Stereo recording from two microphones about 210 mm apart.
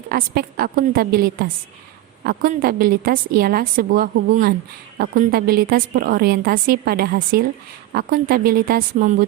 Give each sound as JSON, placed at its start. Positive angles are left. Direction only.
{"t": 0.1, "sound": "a woman's voice", "side_deg": -45}